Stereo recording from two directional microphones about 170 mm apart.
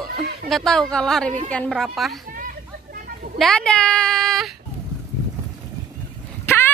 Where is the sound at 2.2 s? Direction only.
50° right (ahead or behind).